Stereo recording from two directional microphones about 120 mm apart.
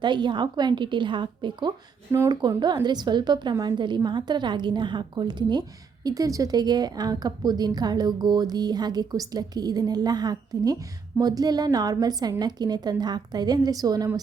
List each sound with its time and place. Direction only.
0.0 s a woman's voice: 40° right (ahead or behind)